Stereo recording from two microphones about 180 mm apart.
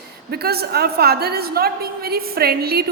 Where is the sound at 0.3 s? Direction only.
60° right (ahead or behind).